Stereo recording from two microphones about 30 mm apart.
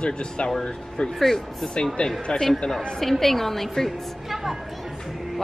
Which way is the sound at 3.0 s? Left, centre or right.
Centre.